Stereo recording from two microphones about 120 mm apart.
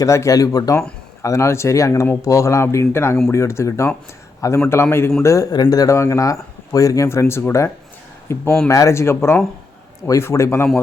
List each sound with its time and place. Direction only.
0.0 s speech: 25° left (ahead or behind)